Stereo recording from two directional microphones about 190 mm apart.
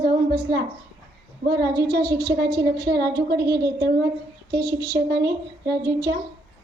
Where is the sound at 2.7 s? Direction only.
60° right (ahead or behind).